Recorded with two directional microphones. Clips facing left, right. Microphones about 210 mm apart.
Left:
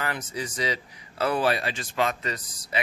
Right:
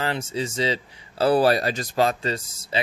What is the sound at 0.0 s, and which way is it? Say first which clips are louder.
Speech: right 5 dB; 25° right (ahead or behind).